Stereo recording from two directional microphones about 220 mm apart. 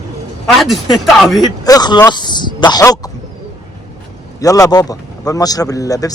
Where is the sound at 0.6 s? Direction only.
Centre (ahead or behind).